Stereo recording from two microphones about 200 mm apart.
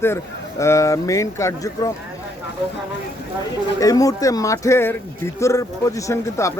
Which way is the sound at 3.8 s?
15° left (ahead or behind).